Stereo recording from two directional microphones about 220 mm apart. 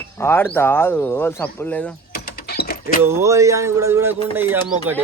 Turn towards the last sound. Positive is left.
turn(degrees=-10)  # may be behind; listen again after turning